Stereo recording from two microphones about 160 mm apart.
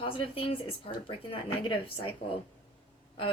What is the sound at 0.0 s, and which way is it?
A woman's voice, 35° left (ahead or behind).